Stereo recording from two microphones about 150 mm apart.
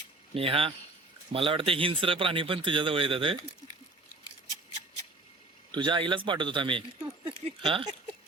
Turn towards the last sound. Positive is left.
turn(degrees=-35)  # may be behind; listen again after turning